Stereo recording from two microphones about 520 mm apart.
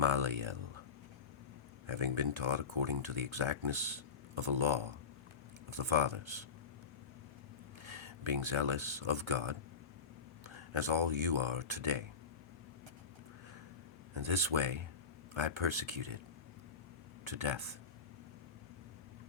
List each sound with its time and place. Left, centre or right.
0.0 s speech: right
1.9 s speech: right
7.9 s speech: right
14.1 s speech: right
17.2 s speech: right